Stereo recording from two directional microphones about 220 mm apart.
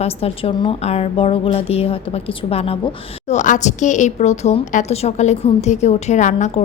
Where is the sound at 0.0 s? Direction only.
25° left (ahead or behind).